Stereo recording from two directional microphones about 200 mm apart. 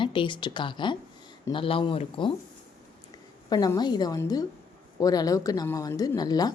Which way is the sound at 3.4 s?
20° left (ahead or behind).